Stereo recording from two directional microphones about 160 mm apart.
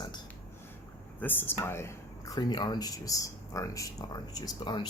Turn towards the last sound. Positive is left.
turn(degrees=25)  # may be behind; listen again after turning